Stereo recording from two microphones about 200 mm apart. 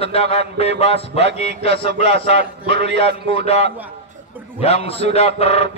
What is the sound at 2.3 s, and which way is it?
A man's voice, 60° right (ahead or behind).